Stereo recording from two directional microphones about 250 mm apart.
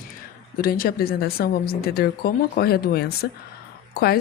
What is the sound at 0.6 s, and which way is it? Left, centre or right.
Speech, left.